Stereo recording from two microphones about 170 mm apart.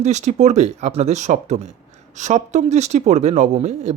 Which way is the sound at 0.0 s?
45° right (ahead or behind).